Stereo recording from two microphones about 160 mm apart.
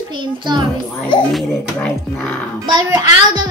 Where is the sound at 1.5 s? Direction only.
10° left (ahead or behind).